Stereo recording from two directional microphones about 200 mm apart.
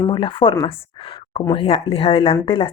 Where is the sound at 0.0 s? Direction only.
25° left (ahead or behind).